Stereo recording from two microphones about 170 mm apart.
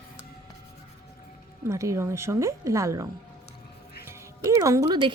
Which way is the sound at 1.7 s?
15° right (ahead or behind).